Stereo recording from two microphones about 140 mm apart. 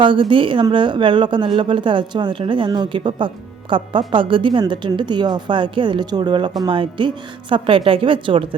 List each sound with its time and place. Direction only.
0.0 s speech: 35° right (ahead or behind)